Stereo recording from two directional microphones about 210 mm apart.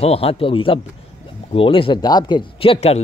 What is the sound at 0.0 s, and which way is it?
Speech, 30° left (ahead or behind).